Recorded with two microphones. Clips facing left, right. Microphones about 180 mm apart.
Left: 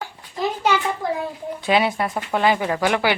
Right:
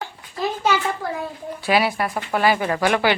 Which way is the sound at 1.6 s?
20° left (ahead or behind).